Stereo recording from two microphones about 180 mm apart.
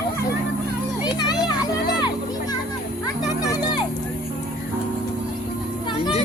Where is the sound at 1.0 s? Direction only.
25° left (ahead or behind).